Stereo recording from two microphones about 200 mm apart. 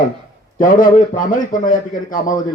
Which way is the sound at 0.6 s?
40° left (ahead or behind).